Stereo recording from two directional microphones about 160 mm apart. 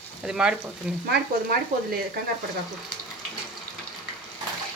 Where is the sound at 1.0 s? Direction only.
80° right.